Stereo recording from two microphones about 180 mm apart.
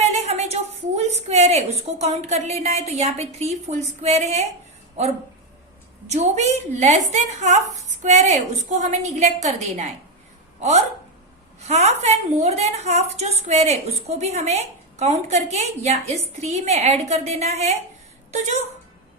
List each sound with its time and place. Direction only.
0.0 s a woman's voice: 40° right (ahead or behind)
11.6 s a woman's voice: 35° right (ahead or behind)